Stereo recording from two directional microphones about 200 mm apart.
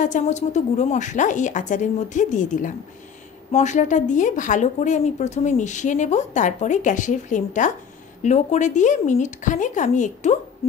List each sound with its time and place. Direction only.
0.0 s speech: 35° left (ahead or behind)